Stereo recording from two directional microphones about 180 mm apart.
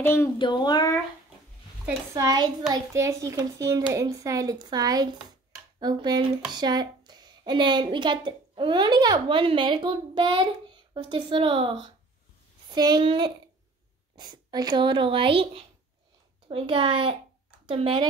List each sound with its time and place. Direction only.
0.0 s child singing: 15° left (ahead or behind)
0.4 s a sound: 25° left (ahead or behind)
1.9 s a child's voice: 20° right (ahead or behind)